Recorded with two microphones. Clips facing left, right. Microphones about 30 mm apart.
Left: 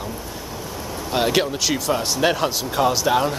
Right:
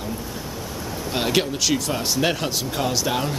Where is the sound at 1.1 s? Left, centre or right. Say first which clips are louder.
Left 3 dB; centre.